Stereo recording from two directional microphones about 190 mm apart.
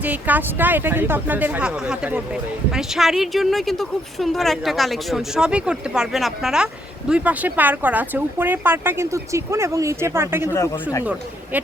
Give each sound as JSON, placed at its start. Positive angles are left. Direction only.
{"t": 0.0, "sound": "speech", "side_deg": -10}
{"t": 10.5, "sound": "speech", "side_deg": 15}
{"t": 11.0, "sound": "speech", "side_deg": -10}